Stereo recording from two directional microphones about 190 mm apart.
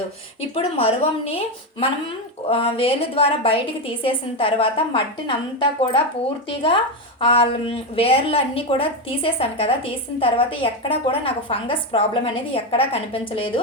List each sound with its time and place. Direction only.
0.5 s a woman's voice: 30° left (ahead or behind)